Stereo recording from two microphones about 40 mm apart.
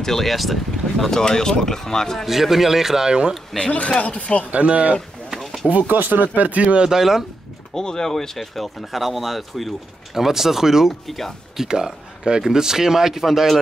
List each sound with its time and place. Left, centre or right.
0.0 s speech: centre
1.1 s speech: centre
2.2 s speech: centre
3.1 s speech: right
3.7 s speech: left
4.5 s speech: right
5.3 s a sound: centre
5.7 s speech: right
6.8 s speech: centre
7.7 s speech: centre
11.1 s speech: centre
11.5 s speech: centre